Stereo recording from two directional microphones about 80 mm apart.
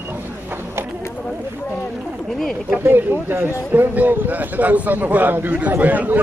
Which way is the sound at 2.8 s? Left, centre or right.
Right.